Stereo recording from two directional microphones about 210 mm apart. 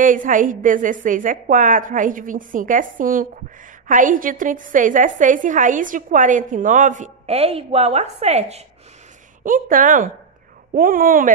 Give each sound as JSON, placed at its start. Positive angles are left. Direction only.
{"t": 0.0, "sound": "a woman's voice", "side_deg": -40}